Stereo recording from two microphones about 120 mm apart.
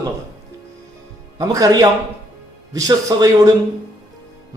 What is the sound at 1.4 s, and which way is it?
A man's voice, 30° right (ahead or behind).